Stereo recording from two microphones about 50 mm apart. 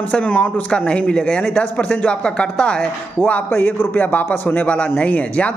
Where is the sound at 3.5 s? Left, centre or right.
Left.